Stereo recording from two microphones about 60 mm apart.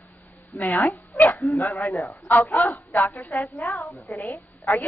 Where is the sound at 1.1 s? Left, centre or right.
Left.